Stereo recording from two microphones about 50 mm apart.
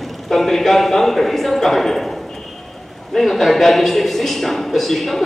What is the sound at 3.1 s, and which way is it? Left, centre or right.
A man's voice, centre.